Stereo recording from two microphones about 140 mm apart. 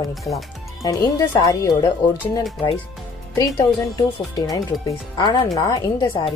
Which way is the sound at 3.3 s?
25° left (ahead or behind).